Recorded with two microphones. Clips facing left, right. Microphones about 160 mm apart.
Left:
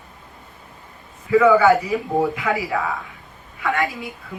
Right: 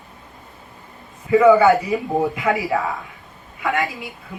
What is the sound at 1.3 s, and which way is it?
A man's voice, 20° right (ahead or behind).